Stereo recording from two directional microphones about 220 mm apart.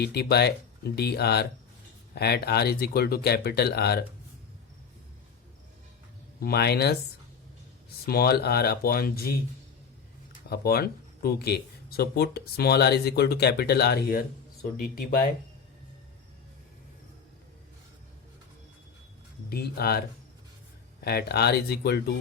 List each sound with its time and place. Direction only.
0.0 s speech: 45° left (ahead or behind)
6.4 s speech: 45° left (ahead or behind)
8.0 s speech: 45° left (ahead or behind)
10.5 s speech: 45° left (ahead or behind)
19.5 s speech: 45° left (ahead or behind)
21.0 s speech: 45° left (ahead or behind)